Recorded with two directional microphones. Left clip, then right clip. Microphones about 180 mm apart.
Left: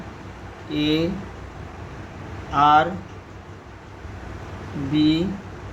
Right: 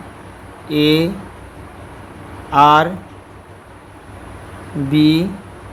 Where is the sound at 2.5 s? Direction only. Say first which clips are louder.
Right 6 dB; 55° right (ahead or behind).